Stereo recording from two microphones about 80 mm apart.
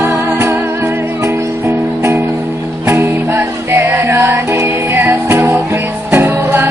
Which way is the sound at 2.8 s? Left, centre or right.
Right.